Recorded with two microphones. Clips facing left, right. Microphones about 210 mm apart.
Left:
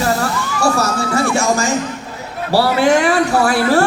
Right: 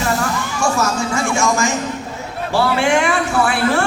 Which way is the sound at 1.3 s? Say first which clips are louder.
Left 2 dB; 35° left (ahead or behind).